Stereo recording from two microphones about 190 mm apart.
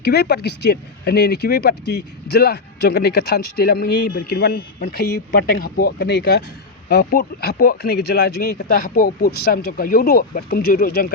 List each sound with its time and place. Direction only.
0.0 s speech: 60° left (ahead or behind)